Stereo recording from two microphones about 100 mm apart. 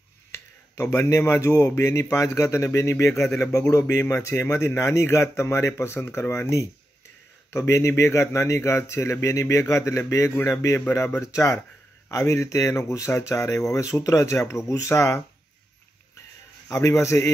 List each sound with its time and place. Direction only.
0.3 s speech: 25° left (ahead or behind)
16.7 s speech: 30° left (ahead or behind)